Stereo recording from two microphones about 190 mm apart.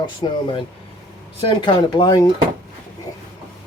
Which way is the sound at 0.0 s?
25° left (ahead or behind).